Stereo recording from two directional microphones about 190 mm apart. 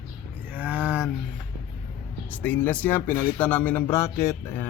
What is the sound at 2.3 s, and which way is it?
Speech, 10° left (ahead or behind).